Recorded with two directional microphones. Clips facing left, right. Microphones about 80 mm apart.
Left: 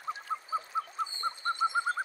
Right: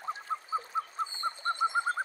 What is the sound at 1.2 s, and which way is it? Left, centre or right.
Bird, centre.